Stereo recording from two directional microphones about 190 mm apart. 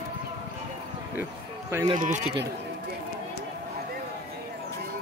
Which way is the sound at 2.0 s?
40° right (ahead or behind).